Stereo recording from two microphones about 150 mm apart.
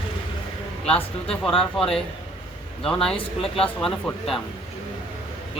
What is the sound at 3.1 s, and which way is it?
Speech, 40° left (ahead or behind).